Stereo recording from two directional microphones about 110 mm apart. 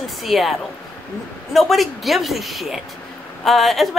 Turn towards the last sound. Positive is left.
turn(degrees=0)  # may be behind; listen again after turning